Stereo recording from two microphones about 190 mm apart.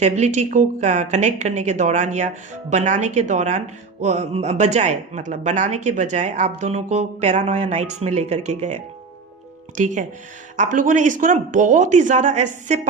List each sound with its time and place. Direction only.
0.0 s speech: 35° right (ahead or behind)